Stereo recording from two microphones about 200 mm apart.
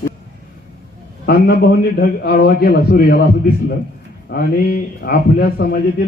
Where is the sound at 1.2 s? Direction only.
50° left (ahead or behind).